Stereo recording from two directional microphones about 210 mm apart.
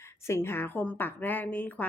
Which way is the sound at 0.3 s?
10° left (ahead or behind).